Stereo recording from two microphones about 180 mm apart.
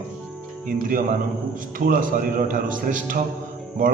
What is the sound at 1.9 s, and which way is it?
A man's voice, 50° right (ahead or behind).